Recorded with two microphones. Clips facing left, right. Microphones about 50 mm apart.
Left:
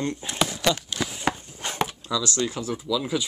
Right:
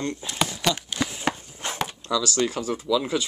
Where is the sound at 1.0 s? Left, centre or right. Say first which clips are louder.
Right 1 dB; centre.